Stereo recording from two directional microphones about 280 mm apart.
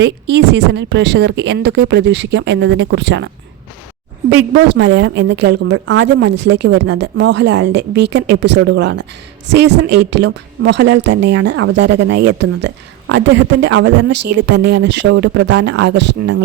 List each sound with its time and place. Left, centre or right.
0.0 s speech: right
4.5 s speech: right